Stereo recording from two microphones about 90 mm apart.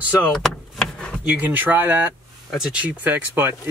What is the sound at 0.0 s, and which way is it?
Speech, 15° right (ahead or behind).